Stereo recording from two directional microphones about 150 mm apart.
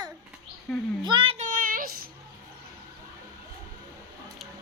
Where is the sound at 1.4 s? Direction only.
60° right (ahead or behind).